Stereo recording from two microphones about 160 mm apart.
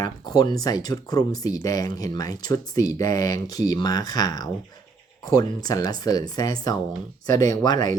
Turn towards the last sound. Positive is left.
turn(degrees=25)  # may be behind; listen again after turning